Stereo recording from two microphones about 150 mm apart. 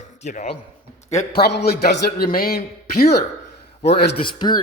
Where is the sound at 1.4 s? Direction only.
90° left.